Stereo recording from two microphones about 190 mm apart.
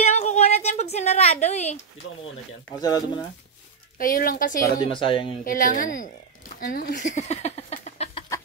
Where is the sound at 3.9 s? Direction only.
50° left (ahead or behind).